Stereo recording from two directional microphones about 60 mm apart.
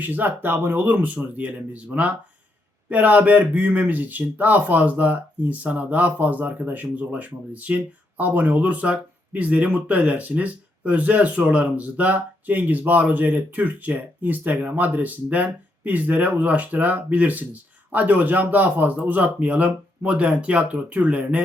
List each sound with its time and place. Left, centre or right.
0.0 s speech: right
0.9 s speech: right